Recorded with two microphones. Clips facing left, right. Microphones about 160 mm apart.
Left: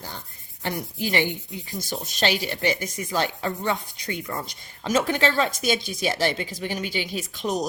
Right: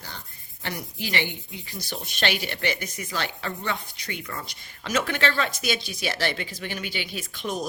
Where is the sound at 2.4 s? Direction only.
40° left (ahead or behind).